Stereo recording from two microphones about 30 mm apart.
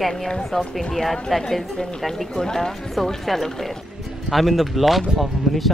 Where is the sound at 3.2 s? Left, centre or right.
Centre.